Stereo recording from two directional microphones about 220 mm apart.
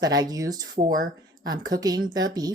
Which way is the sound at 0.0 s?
15° right (ahead or behind).